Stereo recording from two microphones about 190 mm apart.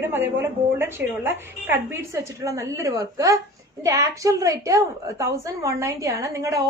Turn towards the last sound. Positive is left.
turn(degrees=-15)  # may be behind; listen again after turning